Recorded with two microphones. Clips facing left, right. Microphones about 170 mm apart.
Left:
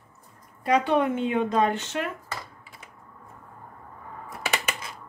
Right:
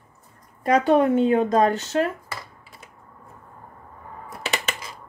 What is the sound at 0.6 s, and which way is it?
Speech, 40° right (ahead or behind).